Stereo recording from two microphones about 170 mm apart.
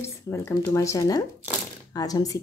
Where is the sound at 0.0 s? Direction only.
15° left (ahead or behind).